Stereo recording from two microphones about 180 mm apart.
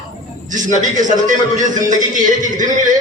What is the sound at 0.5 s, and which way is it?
A man's voice, 45° right (ahead or behind).